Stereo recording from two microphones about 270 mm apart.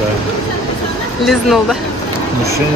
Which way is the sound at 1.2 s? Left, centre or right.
Centre.